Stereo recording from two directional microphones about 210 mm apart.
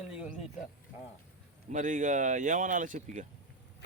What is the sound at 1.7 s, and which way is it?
Speech, 35° right (ahead or behind).